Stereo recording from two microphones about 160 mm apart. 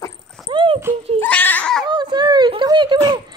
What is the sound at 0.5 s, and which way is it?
Horse, 30° right (ahead or behind).